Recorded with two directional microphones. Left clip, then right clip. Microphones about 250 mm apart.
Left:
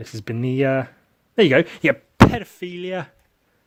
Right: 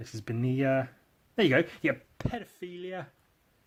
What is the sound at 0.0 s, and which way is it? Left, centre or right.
Speech, left.